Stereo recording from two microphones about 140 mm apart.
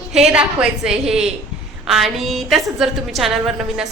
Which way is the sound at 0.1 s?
5° right (ahead or behind).